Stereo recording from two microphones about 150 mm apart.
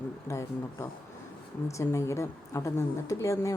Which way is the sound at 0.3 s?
20° left (ahead or behind).